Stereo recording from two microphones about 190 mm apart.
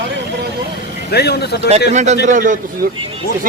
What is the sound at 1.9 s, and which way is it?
Speech, 40° right (ahead or behind).